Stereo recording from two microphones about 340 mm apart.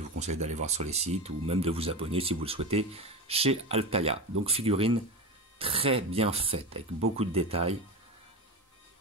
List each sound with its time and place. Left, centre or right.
0.2 s speech: centre